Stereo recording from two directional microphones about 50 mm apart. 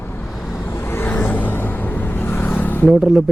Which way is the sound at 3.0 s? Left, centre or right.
Centre.